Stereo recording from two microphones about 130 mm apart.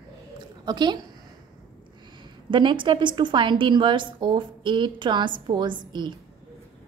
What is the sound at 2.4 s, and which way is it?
A woman's voice, 40° right (ahead or behind).